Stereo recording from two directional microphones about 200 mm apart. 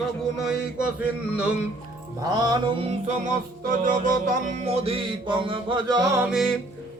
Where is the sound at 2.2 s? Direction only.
20° right (ahead or behind).